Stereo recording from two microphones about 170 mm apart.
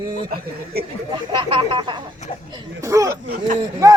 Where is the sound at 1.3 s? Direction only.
30° right (ahead or behind).